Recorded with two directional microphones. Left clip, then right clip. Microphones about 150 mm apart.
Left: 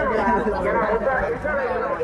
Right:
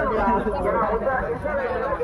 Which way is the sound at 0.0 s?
60° left (ahead or behind).